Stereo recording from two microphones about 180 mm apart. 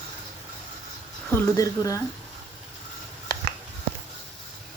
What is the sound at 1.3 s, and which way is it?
Speech, 15° left (ahead or behind).